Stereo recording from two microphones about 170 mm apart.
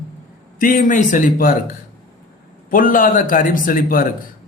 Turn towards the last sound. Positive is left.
turn(degrees=55)  # may be behind; listen again after turning